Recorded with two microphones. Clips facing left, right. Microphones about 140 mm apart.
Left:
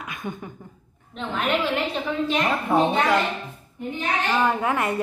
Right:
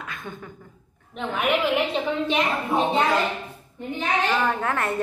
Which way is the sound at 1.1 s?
10° right (ahead or behind).